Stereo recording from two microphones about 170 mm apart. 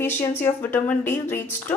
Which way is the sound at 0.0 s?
15° left (ahead or behind).